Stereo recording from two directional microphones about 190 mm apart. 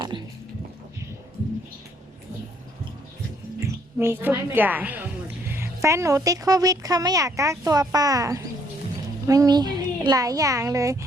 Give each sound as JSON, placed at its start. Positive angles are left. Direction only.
{"t": 0.1, "sound": "a woman's voice", "side_deg": -25}
{"t": 3.9, "sound": "a woman's voice", "side_deg": -10}